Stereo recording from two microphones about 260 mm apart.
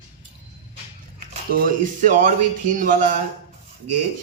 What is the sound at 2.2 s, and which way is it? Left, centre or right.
Speech, right.